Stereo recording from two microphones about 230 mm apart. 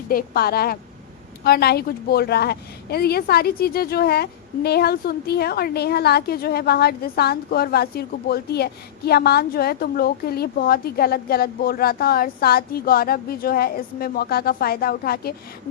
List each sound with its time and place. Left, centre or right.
0.1 s a woman's voice: left